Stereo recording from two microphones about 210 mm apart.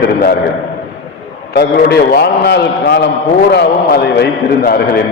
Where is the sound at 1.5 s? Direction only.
50° left (ahead or behind).